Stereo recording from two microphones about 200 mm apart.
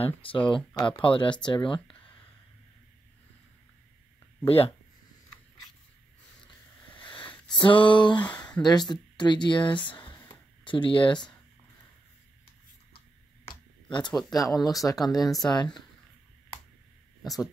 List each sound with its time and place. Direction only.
0.0 s speech: 25° left (ahead or behind)
4.5 s speech: 30° left (ahead or behind)
7.0 s sniff: 25° left (ahead or behind)
7.5 s speech: 25° left (ahead or behind)
9.9 s a sound: 25° left (ahead or behind)
13.9 s speech: 20° left (ahead or behind)
15.1 s speech: centre (ahead or behind)
15.5 s speech: 20° left (ahead or behind)